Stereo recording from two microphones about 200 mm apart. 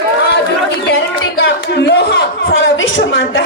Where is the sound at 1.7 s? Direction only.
60° left (ahead or behind).